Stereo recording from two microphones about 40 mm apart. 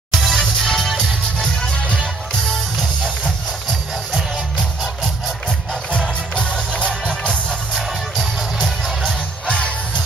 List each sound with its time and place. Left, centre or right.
0.1 s music: centre
5.9 s music: left
7.7 s music: centre